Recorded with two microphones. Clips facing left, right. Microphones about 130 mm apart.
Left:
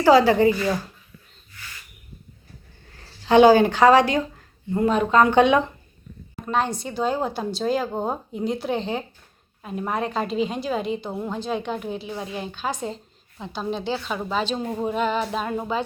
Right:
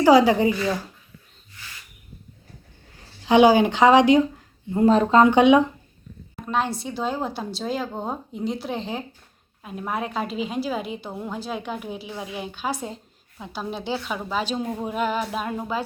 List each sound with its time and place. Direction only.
0.0 s a woman's voice: 15° right (ahead or behind)
3.2 s a woman's voice: 15° right (ahead or behind)
4.8 s speech: 30° right (ahead or behind)
5.1 s a woman's voice: 20° right (ahead or behind)
6.4 s a woman's voice: centre (ahead or behind)
14.6 s a woman's voice: centre (ahead or behind)